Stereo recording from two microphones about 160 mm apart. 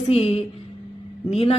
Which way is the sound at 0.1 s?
35° left (ahead or behind).